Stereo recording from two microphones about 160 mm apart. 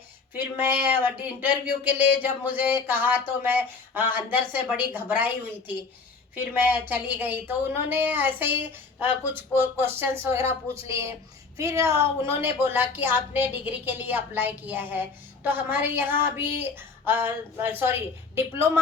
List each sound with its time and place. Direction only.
0.3 s speech: 10° right (ahead or behind)
6.3 s speech: 10° right (ahead or behind)